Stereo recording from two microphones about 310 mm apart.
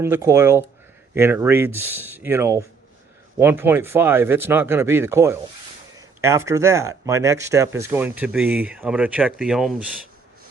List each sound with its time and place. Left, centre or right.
0.0 s speech: centre